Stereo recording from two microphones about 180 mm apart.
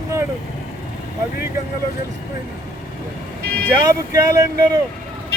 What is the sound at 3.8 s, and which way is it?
Speech, 20° right (ahead or behind).